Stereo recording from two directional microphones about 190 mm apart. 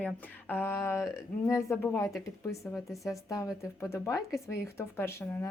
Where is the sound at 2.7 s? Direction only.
Centre (ahead or behind).